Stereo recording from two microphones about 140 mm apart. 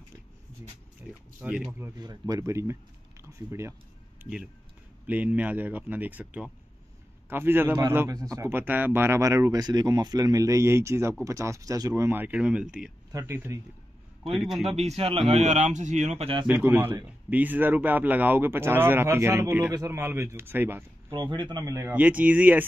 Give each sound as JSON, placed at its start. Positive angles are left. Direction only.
{"t": 1.0, "sound": "a sound", "side_deg": -15}
{"t": 1.4, "sound": "speech", "side_deg": -10}
{"t": 2.0, "sound": "speech", "side_deg": -30}
{"t": 4.2, "sound": "speech", "side_deg": -5}
{"t": 14.2, "sound": "a man's voice", "side_deg": 0}
{"t": 14.7, "sound": "a man's voice", "side_deg": -50}
{"t": 16.4, "sound": "speech", "side_deg": -15}
{"t": 21.1, "sound": "speech", "side_deg": -35}